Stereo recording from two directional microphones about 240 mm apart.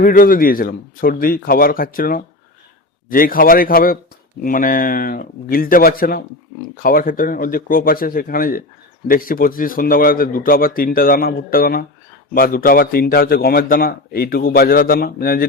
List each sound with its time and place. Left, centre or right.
0.0 s speech: left